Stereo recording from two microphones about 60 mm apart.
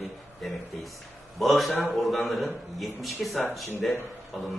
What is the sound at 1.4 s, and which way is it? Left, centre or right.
A man's voice, centre.